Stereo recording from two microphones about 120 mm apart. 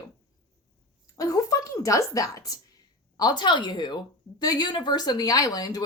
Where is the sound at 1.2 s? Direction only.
30° left (ahead or behind).